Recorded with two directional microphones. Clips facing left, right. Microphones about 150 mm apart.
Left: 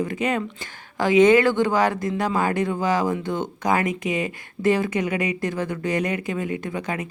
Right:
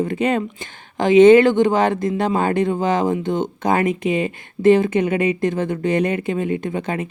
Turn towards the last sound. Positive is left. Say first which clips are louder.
# right 4 dB
turn(degrees=-30)  # may be behind; listen again after turning